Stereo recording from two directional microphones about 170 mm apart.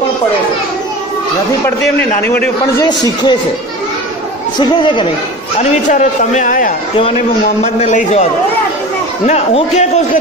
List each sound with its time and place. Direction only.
2.2 s a man's voice: 10° left (ahead or behind)
2.8 s speech: 25° left (ahead or behind)
4.6 s speech: 25° left (ahead or behind)
5.6 s a man's voice: 45° left (ahead or behind)